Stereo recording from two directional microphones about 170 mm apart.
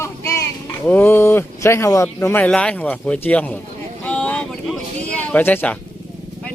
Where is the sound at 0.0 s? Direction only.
15° left (ahead or behind).